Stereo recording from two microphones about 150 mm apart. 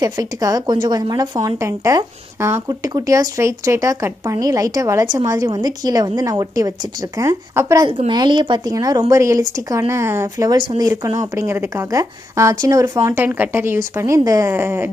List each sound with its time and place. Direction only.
0.0 s speech: 25° right (ahead or behind)